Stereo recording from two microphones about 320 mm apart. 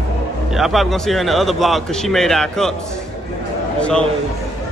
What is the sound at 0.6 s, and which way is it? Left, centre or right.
Speech, centre.